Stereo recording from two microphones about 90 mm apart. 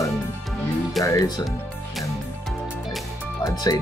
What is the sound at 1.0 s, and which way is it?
Speech, 40° left (ahead or behind).